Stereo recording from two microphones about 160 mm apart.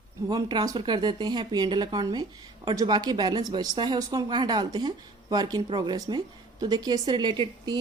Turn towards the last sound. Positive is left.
turn(degrees=-25)  # may be behind; listen again after turning